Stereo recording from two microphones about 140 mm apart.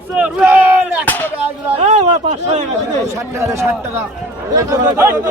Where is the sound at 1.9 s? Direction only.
55° right (ahead or behind).